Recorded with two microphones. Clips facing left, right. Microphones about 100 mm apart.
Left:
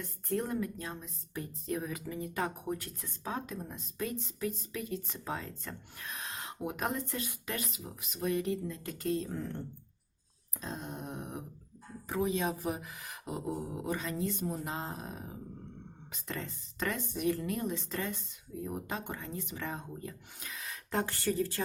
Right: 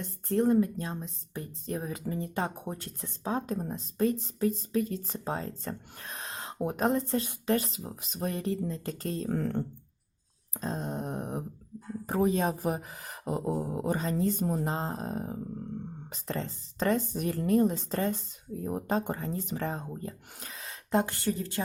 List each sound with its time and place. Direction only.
0.0 s speech: 30° right (ahead or behind)
9.3 s speech: 65° right (ahead or behind)
10.6 s speech: 35° right (ahead or behind)